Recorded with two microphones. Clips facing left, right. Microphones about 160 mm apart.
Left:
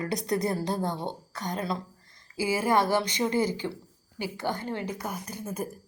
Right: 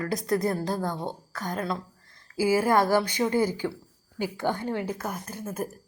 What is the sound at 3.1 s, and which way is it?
A woman's voice, 10° right (ahead or behind).